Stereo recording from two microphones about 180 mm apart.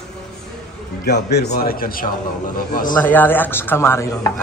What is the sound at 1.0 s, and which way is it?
A man's voice, 65° left (ahead or behind).